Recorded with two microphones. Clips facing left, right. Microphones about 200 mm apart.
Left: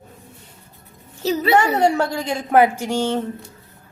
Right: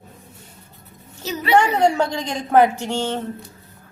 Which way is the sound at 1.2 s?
35° left (ahead or behind).